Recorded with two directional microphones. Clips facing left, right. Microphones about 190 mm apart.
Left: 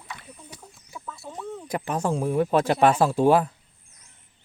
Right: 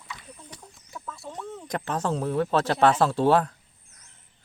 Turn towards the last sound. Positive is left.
turn(degrees=10)  # may be behind; listen again after turning